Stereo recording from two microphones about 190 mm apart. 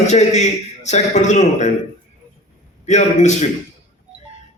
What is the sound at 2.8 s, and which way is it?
Speech, 40° left (ahead or behind).